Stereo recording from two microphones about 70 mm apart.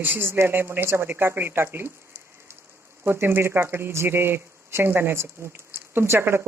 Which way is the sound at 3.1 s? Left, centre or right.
Right.